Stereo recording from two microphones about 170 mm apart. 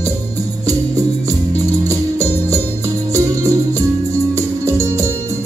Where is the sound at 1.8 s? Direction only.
20° right (ahead or behind).